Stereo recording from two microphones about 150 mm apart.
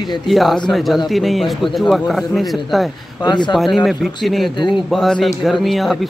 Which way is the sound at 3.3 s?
30° left (ahead or behind).